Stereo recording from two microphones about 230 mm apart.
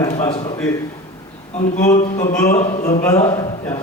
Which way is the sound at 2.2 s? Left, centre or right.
Centre.